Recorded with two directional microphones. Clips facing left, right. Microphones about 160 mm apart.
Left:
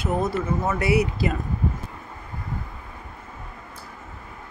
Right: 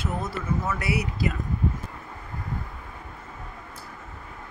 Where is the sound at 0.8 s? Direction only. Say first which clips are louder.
Left 6 dB; 25° left (ahead or behind).